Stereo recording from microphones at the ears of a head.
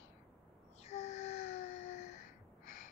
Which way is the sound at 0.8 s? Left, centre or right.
Left.